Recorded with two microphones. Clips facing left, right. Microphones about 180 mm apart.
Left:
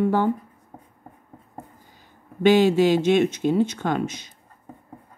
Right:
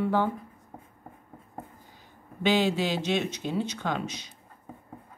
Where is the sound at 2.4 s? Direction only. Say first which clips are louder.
Left 8 dB; 50° left (ahead or behind).